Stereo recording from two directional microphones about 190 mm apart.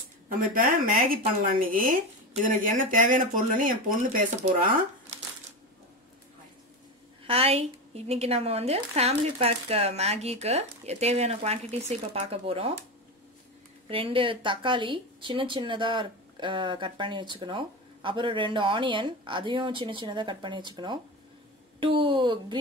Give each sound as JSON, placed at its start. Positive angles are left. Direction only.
{"t": 0.6, "sound": "speech", "side_deg": -45}
{"t": 7.2, "sound": "speech", "side_deg": -30}
{"t": 13.8, "sound": "speech", "side_deg": -30}